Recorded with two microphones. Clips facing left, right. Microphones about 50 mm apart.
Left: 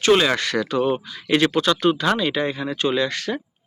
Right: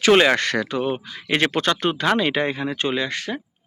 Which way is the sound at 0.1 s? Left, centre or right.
Right.